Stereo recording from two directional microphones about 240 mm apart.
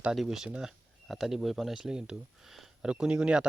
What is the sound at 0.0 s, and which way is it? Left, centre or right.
Speech, centre.